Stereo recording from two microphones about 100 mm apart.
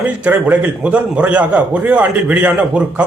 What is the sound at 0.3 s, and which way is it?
A man's voice, 20° right (ahead or behind).